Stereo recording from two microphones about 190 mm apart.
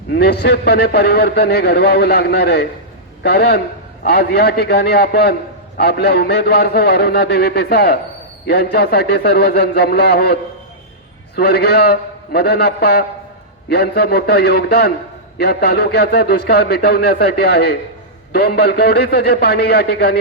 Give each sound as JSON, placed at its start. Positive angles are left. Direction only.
{"t": 0.1, "sound": "a man's voice", "side_deg": 60}
{"t": 11.3, "sound": "a man's voice", "side_deg": 55}